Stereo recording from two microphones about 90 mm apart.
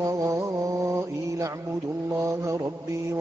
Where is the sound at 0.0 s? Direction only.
35° right (ahead or behind).